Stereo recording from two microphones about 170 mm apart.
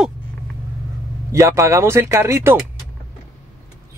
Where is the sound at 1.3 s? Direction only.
20° right (ahead or behind).